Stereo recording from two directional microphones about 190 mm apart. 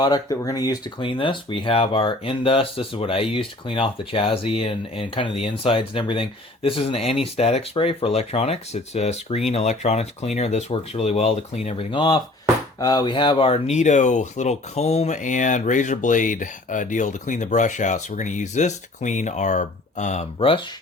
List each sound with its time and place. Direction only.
0.0 s speech: 20° left (ahead or behind)